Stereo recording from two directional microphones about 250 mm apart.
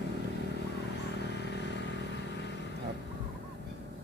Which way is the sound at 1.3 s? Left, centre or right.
Left.